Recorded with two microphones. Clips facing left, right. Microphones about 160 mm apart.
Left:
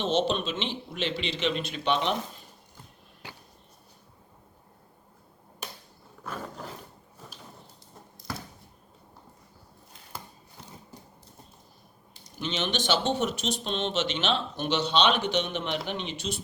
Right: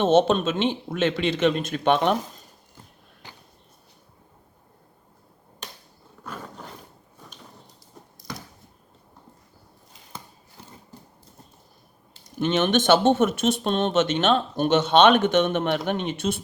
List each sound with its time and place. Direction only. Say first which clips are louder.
0.0 s speech: right 8 dB; 50° right (ahead or behind)
6.2 s roar: even; 5° left (ahead or behind)
12.2 s speech: right 9 dB; 50° right (ahead or behind)